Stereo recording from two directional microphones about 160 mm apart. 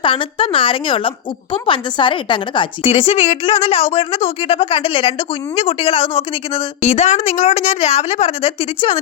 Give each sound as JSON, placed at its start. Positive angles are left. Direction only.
{"t": 0.0, "sound": "a woman's voice", "side_deg": 30}